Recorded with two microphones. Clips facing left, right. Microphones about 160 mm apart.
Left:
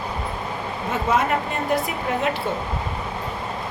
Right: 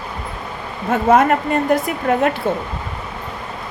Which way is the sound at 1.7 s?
50° right (ahead or behind).